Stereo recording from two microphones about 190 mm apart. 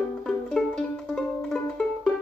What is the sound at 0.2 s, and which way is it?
Music, 5° left (ahead or behind).